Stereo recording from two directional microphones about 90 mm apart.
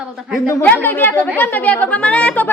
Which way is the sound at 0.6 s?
20° left (ahead or behind).